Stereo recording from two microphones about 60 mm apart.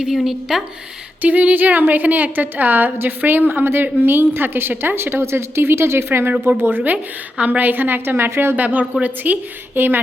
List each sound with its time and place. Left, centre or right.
0.5 s speech: centre
1.2 s a woman's voice: right
8.5 s a woman's voice: right